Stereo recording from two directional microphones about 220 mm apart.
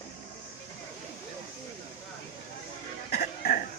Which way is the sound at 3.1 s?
40° left (ahead or behind).